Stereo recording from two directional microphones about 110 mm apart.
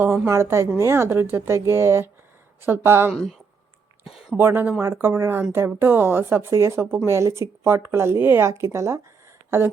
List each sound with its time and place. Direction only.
0.3 s speech: 25° right (ahead or behind)
4.0 s a sound: 5° right (ahead or behind)
4.4 s speech: 20° right (ahead or behind)